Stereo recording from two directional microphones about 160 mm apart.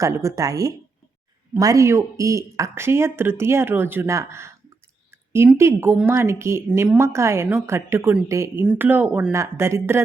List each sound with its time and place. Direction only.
0.0 s speech: 20° right (ahead or behind)
5.5 s speech: 15° right (ahead or behind)